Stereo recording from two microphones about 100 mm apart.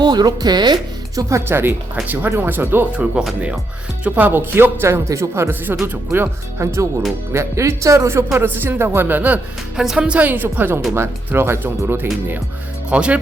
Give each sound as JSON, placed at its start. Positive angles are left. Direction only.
{"t": 0.0, "sound": "speech", "side_deg": -45}
{"t": 1.3, "sound": "speech", "side_deg": -25}
{"t": 3.2, "sound": "a woman's voice", "side_deg": -10}
{"t": 12.9, "sound": "a woman's voice", "side_deg": -15}